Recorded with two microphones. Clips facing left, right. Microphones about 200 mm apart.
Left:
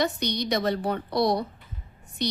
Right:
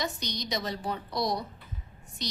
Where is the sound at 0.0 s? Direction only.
65° left (ahead or behind).